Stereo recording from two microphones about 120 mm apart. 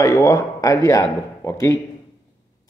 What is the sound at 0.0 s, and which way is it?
A man's voice, 25° left (ahead or behind).